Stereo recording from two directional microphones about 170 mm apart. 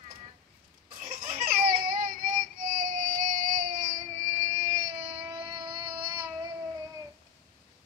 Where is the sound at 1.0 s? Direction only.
45° right (ahead or behind); by 6.3 s 25° right (ahead or behind).